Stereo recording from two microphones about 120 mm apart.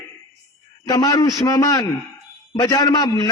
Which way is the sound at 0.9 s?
35° left (ahead or behind).